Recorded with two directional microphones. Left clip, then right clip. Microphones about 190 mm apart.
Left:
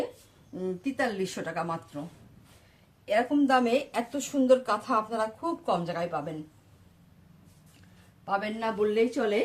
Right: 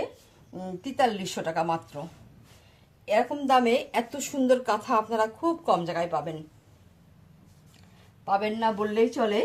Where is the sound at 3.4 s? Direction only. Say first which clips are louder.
Right 2 dB; 50° right (ahead or behind).